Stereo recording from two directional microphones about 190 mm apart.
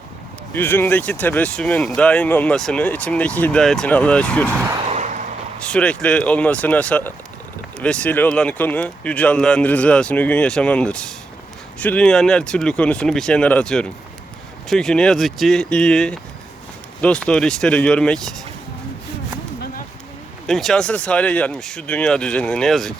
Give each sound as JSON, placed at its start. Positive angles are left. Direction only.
{"t": 0.5, "sound": "speech", "side_deg": 10}
{"t": 4.9, "sound": "vehicle", "side_deg": -40}
{"t": 5.6, "sound": "speech", "side_deg": 5}
{"t": 20.5, "sound": "speech", "side_deg": 0}